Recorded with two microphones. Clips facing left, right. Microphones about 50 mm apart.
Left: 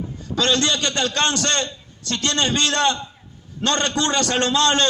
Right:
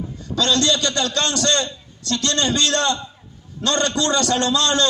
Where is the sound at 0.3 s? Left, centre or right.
Left.